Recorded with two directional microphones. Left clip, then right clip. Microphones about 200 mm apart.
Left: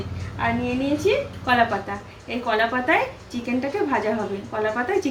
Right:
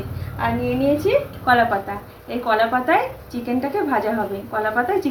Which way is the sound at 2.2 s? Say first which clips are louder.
Right 3 dB; 5° right (ahead or behind).